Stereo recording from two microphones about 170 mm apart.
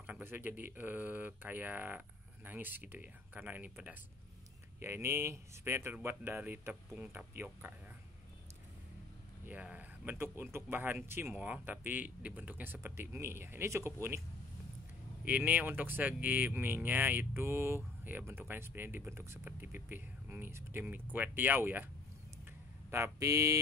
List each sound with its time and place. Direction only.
0.0 s speech: 10° right (ahead or behind)
9.5 s speech: 10° right (ahead or behind)
15.2 s speech: 10° right (ahead or behind)
22.8 s speech: 15° right (ahead or behind)